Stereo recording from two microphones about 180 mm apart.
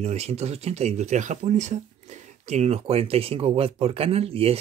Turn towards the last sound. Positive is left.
turn(degrees=-35)  # may be behind; listen again after turning